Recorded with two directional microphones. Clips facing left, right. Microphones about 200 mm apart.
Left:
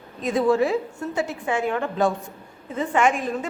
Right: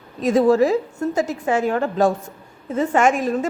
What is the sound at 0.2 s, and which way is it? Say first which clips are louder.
A woman's voice: right 5 dB; 45° right (ahead or behind).